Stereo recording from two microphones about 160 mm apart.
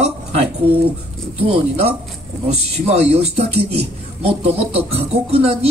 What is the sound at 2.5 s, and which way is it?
A man's voice, 40° right (ahead or behind).